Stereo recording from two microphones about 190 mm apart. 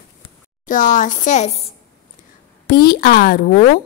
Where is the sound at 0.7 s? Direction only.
45° left (ahead or behind).